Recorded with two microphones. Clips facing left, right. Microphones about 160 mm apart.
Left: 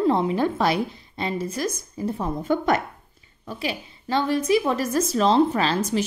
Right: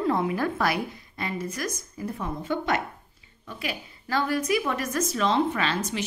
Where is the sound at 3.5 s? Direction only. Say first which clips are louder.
Left 5 dB; 30° left (ahead or behind).